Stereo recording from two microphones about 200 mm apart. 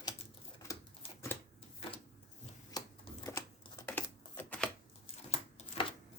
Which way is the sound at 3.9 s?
10° left (ahead or behind).